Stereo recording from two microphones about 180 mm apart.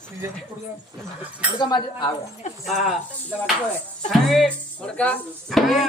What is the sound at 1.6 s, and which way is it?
Speech, 25° left (ahead or behind).